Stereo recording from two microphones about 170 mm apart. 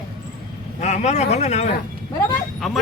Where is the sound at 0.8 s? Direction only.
45° left (ahead or behind).